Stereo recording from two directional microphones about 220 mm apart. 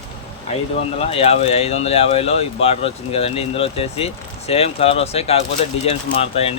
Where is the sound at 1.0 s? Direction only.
25° left (ahead or behind).